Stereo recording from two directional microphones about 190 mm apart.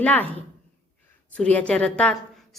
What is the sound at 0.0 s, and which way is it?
Speech, 10° left (ahead or behind).